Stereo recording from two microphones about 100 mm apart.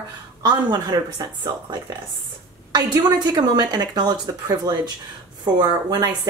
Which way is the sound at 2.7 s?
40° right (ahead or behind).